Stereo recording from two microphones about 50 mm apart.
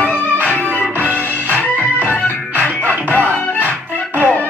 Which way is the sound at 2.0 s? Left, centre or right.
Left.